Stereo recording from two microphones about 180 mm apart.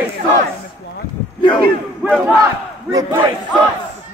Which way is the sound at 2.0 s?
Centre (ahead or behind).